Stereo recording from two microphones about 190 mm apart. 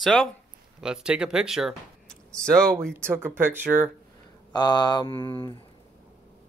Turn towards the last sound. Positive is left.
turn(degrees=20)  # may be behind; listen again after turning